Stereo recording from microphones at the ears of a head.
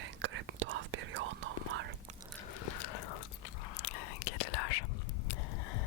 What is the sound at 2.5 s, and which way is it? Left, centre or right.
Biting, left.